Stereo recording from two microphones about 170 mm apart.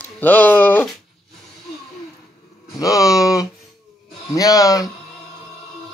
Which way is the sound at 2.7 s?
20° left (ahead or behind).